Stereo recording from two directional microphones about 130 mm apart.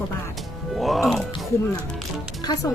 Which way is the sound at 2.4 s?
30° left (ahead or behind).